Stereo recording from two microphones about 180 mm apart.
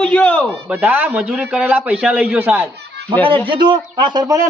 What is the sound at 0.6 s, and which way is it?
A man's voice, 10° right (ahead or behind).